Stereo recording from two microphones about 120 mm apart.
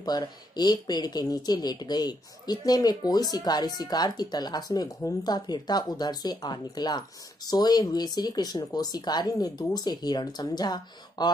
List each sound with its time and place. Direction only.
0.0 s speech: 35° left (ahead or behind)